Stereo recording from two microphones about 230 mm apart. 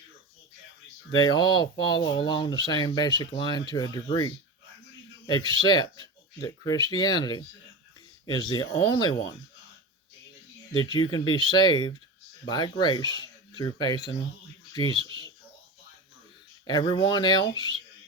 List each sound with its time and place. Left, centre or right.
1.1 s speech: centre
10.7 s speech: centre
16.6 s speech: centre